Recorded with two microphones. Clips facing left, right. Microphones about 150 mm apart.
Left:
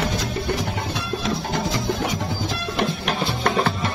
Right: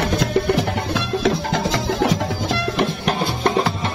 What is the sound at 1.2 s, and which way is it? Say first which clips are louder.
Music: right 5 dB; 90° right.